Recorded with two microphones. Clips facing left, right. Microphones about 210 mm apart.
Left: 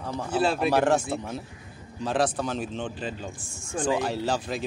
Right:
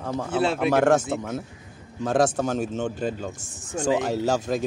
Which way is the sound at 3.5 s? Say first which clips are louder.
Right 1 dB; 20° right (ahead or behind).